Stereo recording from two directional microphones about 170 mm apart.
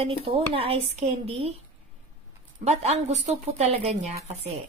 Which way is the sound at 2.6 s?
40° right (ahead or behind).